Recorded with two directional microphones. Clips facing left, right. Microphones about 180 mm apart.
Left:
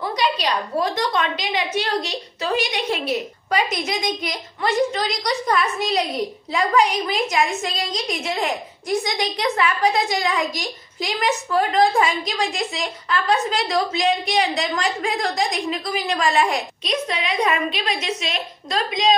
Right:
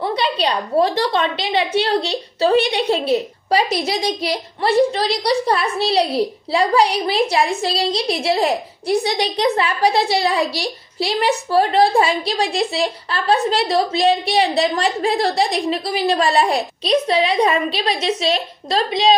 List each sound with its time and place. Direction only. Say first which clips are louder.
0.0 s a woman's voice: right 3 dB; 30° right (ahead or behind)